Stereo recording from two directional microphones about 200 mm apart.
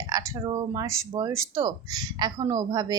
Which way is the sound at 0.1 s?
15° right (ahead or behind).